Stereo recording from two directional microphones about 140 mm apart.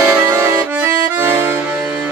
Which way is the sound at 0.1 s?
15° right (ahead or behind).